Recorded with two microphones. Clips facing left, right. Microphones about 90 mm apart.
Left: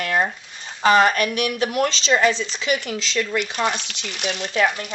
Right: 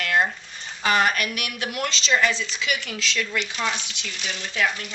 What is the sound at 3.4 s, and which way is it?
Speech, 50° left (ahead or behind).